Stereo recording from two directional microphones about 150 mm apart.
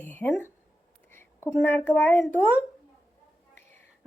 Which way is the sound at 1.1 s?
15° left (ahead or behind).